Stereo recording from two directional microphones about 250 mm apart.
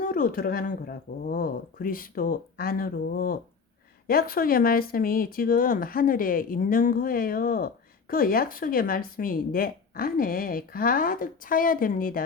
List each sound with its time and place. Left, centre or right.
0.0 s speech: left